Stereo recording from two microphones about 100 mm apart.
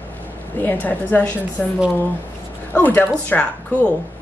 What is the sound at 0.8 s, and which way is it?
Speech, 15° left (ahead or behind).